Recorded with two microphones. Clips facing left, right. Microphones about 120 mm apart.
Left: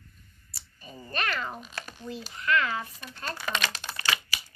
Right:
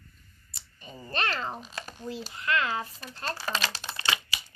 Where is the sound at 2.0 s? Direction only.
30° right (ahead or behind).